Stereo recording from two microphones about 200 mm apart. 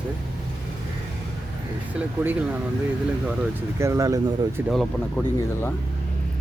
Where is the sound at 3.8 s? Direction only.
15° right (ahead or behind).